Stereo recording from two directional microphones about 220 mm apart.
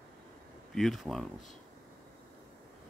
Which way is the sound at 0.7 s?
Centre (ahead or behind).